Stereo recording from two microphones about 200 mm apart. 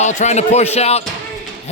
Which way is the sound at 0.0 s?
35° left (ahead or behind).